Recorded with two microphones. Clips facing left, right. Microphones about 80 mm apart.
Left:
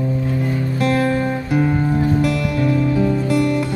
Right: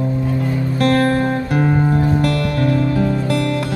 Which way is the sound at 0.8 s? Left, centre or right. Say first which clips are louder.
Right 3 dB; right.